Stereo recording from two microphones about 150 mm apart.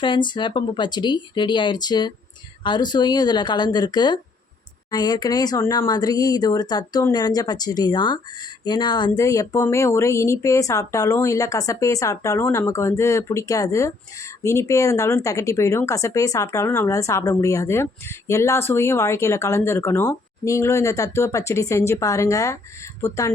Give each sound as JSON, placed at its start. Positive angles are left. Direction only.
{"t": 0.0, "sound": "speech", "side_deg": 30}